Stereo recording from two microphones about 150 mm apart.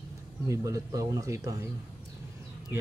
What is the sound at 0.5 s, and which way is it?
Speech, 25° right (ahead or behind).